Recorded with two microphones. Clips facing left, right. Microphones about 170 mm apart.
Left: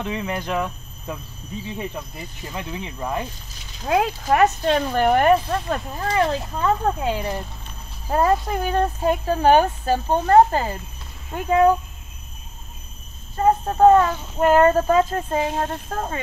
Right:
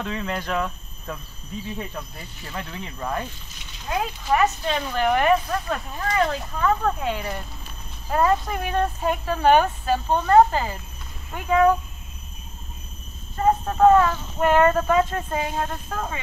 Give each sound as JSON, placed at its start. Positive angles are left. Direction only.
{"t": 0.0, "sound": "speech", "side_deg": 15}
{"t": 3.8, "sound": "speech", "side_deg": 90}
{"t": 4.2, "sound": "speech", "side_deg": 50}
{"t": 5.5, "sound": "speech", "side_deg": 30}
{"t": 13.4, "sound": "speech", "side_deg": 30}